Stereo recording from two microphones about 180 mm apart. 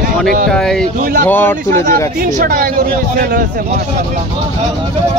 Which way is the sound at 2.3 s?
55° right (ahead or behind).